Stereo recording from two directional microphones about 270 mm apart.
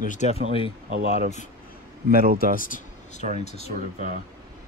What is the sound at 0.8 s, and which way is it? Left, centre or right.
Speech, right.